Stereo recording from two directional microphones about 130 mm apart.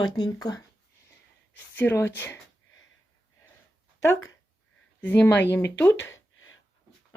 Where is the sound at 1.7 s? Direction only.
15° left (ahead or behind).